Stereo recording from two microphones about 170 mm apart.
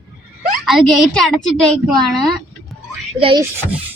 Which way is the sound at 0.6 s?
Centre (ahead or behind).